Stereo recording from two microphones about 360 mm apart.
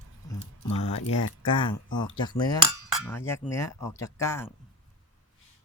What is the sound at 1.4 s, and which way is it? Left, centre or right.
Speech, centre.